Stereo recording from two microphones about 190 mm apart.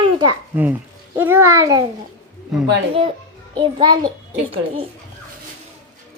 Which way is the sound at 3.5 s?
25° right (ahead or behind).